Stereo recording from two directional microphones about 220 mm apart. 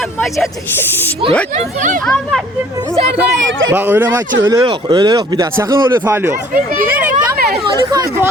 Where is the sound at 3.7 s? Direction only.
10° right (ahead or behind).